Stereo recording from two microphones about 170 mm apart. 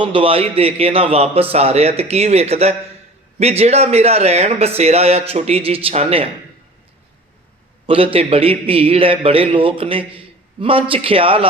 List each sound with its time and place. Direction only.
0.0 s a man's voice: 30° right (ahead or behind)
7.9 s a man's voice: 30° right (ahead or behind)